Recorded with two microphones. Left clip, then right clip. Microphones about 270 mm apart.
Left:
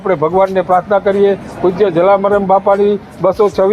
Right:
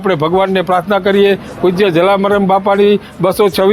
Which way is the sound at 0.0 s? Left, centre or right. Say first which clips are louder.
Left 1 dB; right.